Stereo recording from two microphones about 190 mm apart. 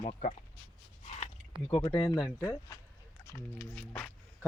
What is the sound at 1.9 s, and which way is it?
Speech, 25° left (ahead or behind).